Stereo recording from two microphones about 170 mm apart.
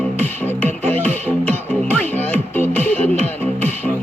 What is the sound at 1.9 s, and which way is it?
Music, 10° left (ahead or behind).